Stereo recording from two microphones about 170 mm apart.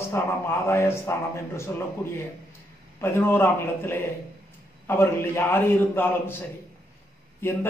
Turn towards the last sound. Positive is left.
turn(degrees=10)  # may be behind; listen again after turning